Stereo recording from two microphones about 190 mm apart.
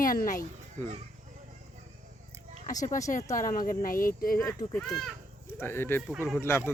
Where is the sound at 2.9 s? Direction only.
40° left (ahead or behind).